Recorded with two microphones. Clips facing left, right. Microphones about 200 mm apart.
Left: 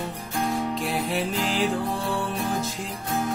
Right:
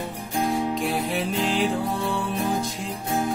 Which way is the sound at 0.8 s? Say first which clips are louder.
Right 1 dB; centre (ahead or behind).